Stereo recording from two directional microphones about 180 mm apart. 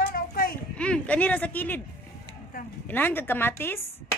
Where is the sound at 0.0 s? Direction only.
55° left (ahead or behind).